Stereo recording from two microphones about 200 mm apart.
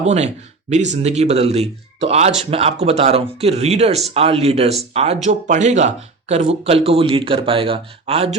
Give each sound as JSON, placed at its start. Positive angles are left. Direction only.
{"t": 0.0, "sound": "speech", "side_deg": -35}